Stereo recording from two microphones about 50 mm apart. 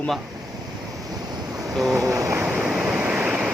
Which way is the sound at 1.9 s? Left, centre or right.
Right.